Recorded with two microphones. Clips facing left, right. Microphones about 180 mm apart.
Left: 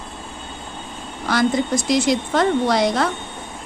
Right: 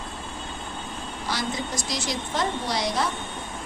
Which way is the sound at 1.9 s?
55° left (ahead or behind).